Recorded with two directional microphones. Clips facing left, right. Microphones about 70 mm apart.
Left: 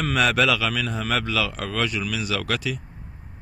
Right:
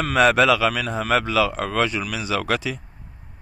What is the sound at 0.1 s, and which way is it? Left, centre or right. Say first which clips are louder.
A man's voice: right 5 dB; right.